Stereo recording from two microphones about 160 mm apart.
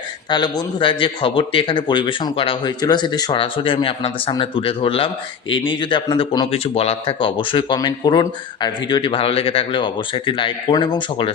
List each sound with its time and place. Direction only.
0.3 s speech: 25° left (ahead or behind)